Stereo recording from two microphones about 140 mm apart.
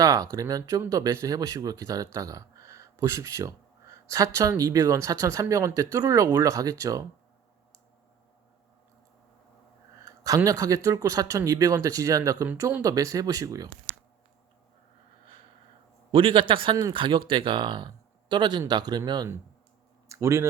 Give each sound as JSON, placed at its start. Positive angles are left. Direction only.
{"t": 0.0, "sound": "speech", "side_deg": -25}
{"t": 10.1, "sound": "speech", "side_deg": -25}
{"t": 16.1, "sound": "speech", "side_deg": -40}
{"t": 20.1, "sound": "speech", "side_deg": -20}